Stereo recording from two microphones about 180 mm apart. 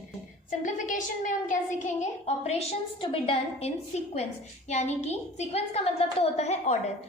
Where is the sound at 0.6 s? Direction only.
45° left (ahead or behind).